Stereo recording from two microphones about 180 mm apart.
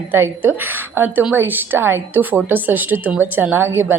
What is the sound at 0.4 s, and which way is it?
A woman's voice, 10° right (ahead or behind).